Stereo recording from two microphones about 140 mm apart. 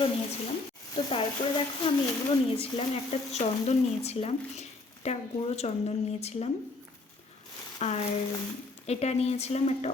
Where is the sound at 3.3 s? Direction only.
50° left (ahead or behind).